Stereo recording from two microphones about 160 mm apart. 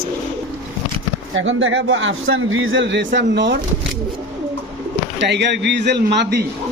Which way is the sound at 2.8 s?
90° right.